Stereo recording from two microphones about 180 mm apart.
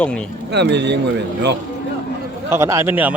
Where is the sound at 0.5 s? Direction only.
70° right (ahead or behind).